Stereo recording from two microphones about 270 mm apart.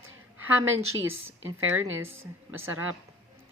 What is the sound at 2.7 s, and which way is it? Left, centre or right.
Speech, right.